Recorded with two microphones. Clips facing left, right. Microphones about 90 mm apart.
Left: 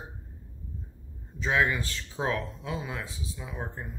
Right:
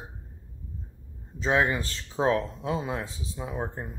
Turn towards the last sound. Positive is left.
turn(degrees=-25)  # may be behind; listen again after turning